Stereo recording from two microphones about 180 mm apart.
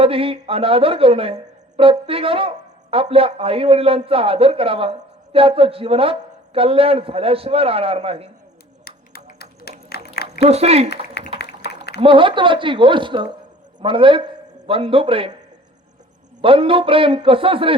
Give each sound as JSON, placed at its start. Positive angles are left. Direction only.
{"t": 0.0, "sound": "speech", "side_deg": -30}
{"t": 8.8, "sound": "a sound", "side_deg": 60}
{"t": 10.5, "sound": "speech", "side_deg": -35}
{"t": 11.3, "sound": "a sound", "side_deg": 65}
{"t": 11.9, "sound": "a woman's voice", "side_deg": -30}
{"t": 16.4, "sound": "a woman's voice", "side_deg": -30}